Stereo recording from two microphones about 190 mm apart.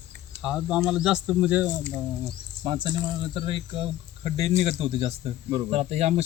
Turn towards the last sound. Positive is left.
turn(degrees=-35)  # may be behind; listen again after turning